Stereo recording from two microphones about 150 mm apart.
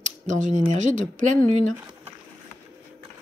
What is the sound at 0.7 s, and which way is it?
Speech, 55° right (ahead or behind).